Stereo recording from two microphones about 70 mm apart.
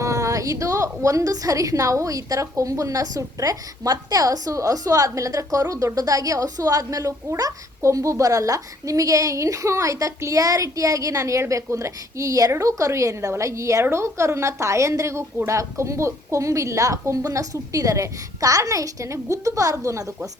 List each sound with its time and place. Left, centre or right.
0.0 s a woman's voice: right